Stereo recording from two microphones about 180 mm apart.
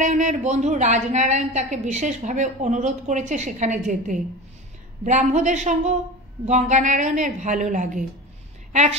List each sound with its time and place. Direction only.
0.0 s a woman's voice: 45° right (ahead or behind)